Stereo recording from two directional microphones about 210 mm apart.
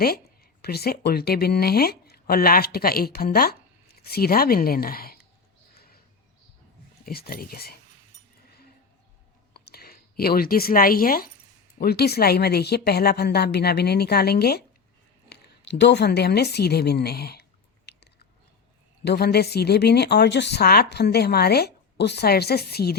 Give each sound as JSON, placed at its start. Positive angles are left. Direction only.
{"t": 0.0, "sound": "speech", "side_deg": 45}
{"t": 5.7, "sound": "a sound", "side_deg": 45}
{"t": 7.0, "sound": "speech", "side_deg": 45}
{"t": 9.5, "sound": "a woman's voice", "side_deg": 50}
{"t": 17.9, "sound": "chewing", "side_deg": 55}
{"t": 19.0, "sound": "speech", "side_deg": 50}